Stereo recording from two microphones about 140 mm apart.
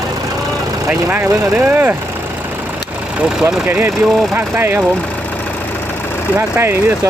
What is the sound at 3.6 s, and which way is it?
Speech, 15° right (ahead or behind).